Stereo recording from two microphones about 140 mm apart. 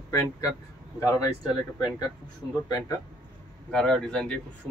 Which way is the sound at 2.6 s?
30° left (ahead or behind).